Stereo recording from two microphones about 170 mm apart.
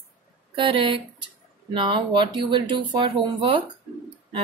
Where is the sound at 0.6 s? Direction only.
30° right (ahead or behind).